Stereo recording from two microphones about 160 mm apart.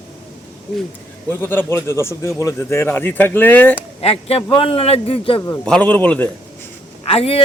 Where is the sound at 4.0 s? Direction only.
40° left (ahead or behind).